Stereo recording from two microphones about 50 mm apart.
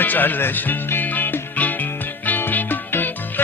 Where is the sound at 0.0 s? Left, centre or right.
Left.